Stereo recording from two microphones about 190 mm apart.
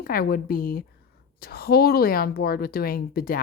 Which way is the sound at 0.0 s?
50° left (ahead or behind).